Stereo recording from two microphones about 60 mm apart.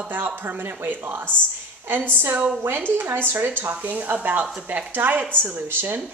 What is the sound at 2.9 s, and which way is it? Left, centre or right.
Speech, right.